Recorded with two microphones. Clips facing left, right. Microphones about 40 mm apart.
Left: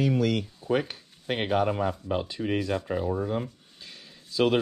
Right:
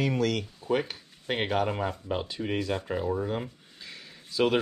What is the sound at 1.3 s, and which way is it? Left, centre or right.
Speech, centre.